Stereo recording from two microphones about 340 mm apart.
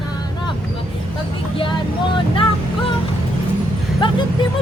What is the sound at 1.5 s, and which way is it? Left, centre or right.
Music, centre.